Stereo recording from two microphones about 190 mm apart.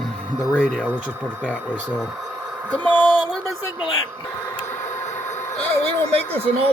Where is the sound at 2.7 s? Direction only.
5° left (ahead or behind).